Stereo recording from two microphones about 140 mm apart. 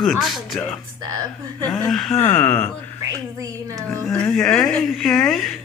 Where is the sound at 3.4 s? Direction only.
25° right (ahead or behind).